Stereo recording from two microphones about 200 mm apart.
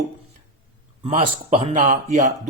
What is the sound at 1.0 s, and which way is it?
A man's voice, 30° right (ahead or behind).